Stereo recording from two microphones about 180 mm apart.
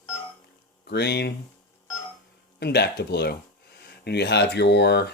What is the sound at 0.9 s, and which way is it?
Speech, 65° left (ahead or behind).